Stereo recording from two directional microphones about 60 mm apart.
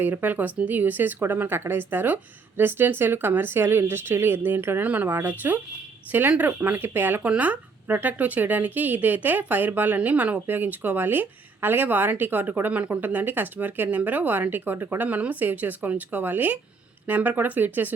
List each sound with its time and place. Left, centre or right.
0.0 s speech: right